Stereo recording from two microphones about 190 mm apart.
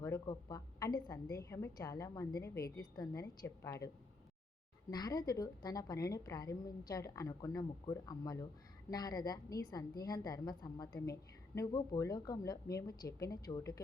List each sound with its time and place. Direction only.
0.0 s a woman's voice: 20° left (ahead or behind)
4.9 s a woman's voice: 20° left (ahead or behind)